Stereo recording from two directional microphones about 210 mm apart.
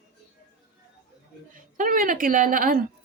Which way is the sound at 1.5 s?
40° right (ahead or behind).